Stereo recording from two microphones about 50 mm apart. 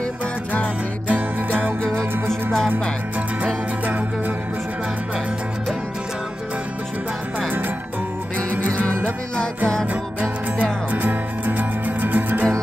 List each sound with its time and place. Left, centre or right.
1.5 s music: right
1.9 s music: right
8.5 s music: right
10.6 s music: right